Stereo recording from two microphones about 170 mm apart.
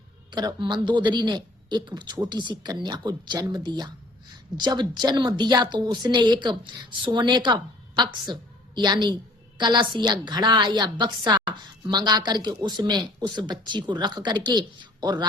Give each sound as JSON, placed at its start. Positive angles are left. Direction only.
{"t": 0.3, "sound": "a woman's voice", "side_deg": -25}